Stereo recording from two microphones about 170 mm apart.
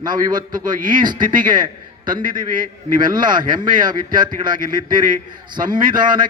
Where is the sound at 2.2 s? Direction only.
55° right (ahead or behind).